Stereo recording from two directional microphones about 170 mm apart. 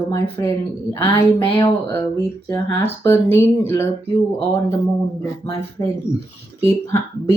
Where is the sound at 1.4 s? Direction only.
30° left (ahead or behind).